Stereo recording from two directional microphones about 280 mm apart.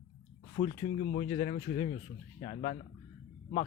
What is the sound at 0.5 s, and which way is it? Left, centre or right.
Speech, left.